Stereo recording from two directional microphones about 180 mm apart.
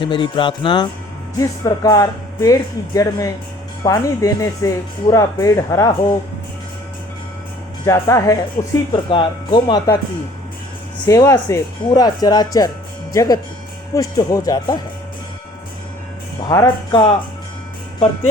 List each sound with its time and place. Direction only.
0.0 s speech: 25° left (ahead or behind)
7.9 s speech: 15° left (ahead or behind)
11.0 s speech: 20° left (ahead or behind)
16.4 s speech: 20° left (ahead or behind)